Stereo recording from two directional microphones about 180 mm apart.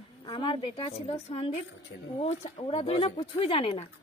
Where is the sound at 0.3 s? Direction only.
30° left (ahead or behind).